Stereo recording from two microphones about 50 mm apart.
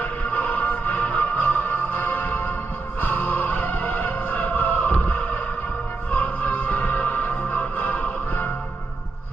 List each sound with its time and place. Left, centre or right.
0.0 s music: left